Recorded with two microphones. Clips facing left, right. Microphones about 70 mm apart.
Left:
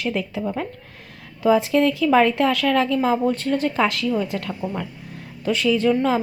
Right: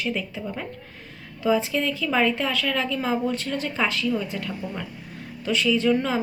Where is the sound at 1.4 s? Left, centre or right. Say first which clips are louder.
Left 6 dB; left.